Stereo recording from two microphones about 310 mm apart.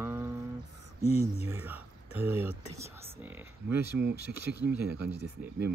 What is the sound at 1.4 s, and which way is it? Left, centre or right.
Speech, centre.